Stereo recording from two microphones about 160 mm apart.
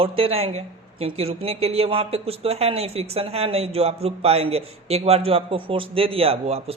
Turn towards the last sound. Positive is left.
turn(degrees=-35)  # may be behind; listen again after turning